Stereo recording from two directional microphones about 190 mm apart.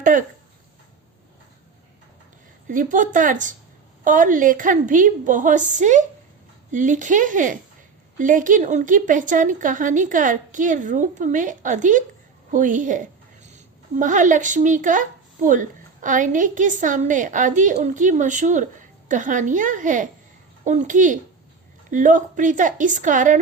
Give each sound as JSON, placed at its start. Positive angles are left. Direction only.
{"t": 0.0, "sound": "speech", "side_deg": -45}
{"t": 2.6, "sound": "speech", "side_deg": -45}
{"t": 12.5, "sound": "a sound", "side_deg": -40}
{"t": 13.9, "sound": "a child's voice", "side_deg": -45}